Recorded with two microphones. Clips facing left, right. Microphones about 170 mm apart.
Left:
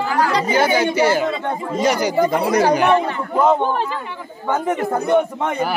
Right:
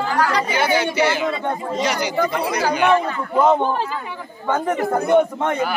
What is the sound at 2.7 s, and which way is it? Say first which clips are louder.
Speech: right 1 dB; 40° left (ahead or behind).